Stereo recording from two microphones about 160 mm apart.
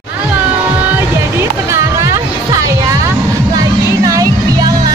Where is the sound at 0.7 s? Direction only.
15° right (ahead or behind).